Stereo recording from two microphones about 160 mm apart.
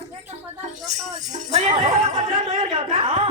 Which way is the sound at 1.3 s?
45° right (ahead or behind).